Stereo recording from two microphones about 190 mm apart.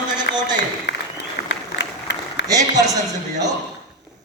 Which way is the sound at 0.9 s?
65° left (ahead or behind).